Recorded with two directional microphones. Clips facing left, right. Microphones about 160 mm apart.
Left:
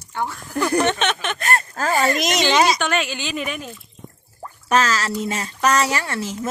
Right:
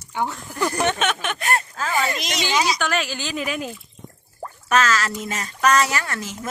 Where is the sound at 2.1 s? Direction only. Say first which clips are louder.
Left 6 dB; 50° left (ahead or behind).